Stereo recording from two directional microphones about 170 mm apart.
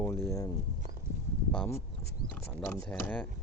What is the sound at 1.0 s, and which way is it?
Horse, 15° right (ahead or behind).